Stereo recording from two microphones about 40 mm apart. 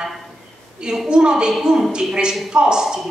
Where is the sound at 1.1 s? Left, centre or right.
Right.